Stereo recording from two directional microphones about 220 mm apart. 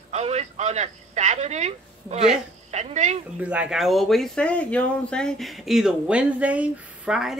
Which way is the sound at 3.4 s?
5° right (ahead or behind).